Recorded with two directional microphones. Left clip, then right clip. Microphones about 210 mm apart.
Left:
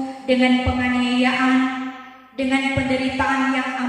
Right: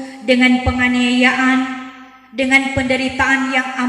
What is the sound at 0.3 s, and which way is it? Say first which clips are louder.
Speech: right 5 dB; 50° right (ahead or behind).